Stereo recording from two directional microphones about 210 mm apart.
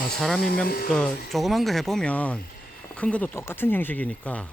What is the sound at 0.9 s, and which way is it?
Speech, 5° left (ahead or behind).